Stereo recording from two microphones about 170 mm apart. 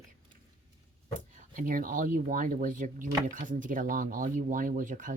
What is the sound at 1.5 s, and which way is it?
Speech, 55° right (ahead or behind).